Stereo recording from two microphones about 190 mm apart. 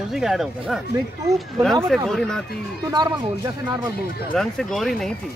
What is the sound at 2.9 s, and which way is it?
Speech, 20° right (ahead or behind).